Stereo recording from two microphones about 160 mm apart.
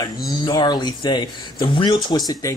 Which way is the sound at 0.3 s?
25° left (ahead or behind).